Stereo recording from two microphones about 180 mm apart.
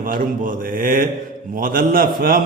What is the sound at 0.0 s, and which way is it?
A man's voice, 50° right (ahead or behind).